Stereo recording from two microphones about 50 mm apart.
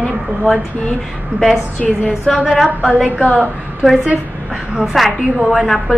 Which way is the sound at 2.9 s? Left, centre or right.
Right.